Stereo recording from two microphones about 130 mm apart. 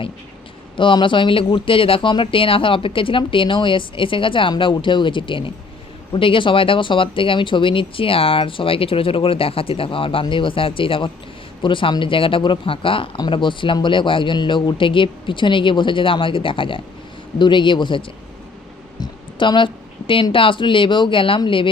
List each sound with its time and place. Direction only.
0.8 s speech: 40° left (ahead or behind)